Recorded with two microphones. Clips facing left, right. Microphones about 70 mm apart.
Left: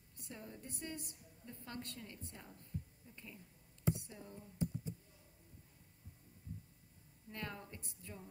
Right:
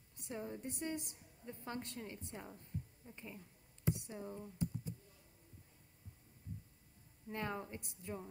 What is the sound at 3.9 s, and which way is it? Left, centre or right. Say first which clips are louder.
Speech: right 4 dB; right.